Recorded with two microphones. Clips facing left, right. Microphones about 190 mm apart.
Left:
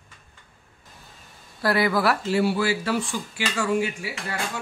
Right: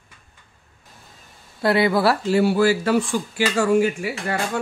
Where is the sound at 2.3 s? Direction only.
45° right (ahead or behind).